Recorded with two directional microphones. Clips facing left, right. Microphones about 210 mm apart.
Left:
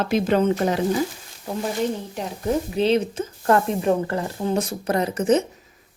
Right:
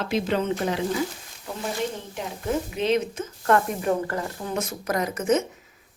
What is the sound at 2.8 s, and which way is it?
A woman's voice, 30° left (ahead or behind).